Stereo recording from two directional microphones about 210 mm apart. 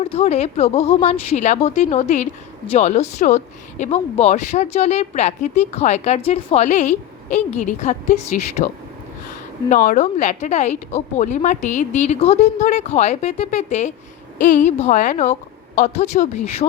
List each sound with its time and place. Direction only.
0.0 s speech: 30° left (ahead or behind)